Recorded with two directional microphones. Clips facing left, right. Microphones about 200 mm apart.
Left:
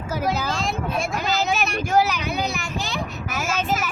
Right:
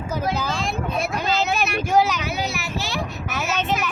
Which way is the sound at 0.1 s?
Centre (ahead or behind).